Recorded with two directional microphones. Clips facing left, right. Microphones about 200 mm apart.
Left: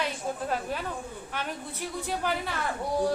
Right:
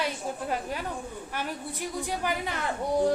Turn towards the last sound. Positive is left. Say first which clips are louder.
# right 2 dB
turn(degrees=-20)  # may be behind; listen again after turning